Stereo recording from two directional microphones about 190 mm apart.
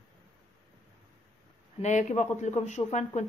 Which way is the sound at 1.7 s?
40° left (ahead or behind).